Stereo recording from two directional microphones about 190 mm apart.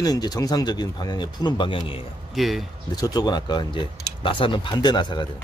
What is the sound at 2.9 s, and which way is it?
Speech, 20° left (ahead or behind).